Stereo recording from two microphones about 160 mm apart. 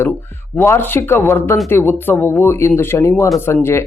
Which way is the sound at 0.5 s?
15° left (ahead or behind).